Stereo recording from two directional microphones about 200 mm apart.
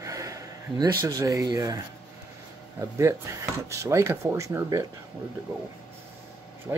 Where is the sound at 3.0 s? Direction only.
15° right (ahead or behind).